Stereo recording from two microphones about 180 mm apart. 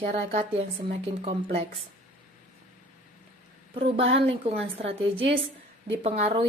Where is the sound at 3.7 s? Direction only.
30° right (ahead or behind).